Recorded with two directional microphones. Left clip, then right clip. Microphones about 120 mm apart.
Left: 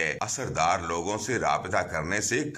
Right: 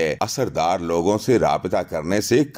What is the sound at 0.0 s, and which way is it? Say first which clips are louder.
Speech: right 8 dB; 45° right (ahead or behind).